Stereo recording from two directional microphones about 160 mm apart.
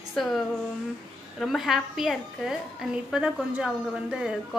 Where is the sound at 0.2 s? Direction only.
Centre (ahead or behind).